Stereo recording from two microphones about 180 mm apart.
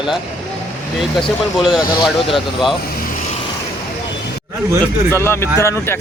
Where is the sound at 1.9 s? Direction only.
25° left (ahead or behind).